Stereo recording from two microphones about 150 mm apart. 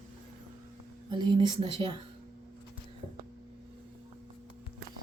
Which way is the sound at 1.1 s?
30° right (ahead or behind).